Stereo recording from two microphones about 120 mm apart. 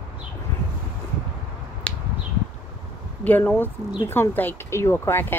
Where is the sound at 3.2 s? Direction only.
15° left (ahead or behind).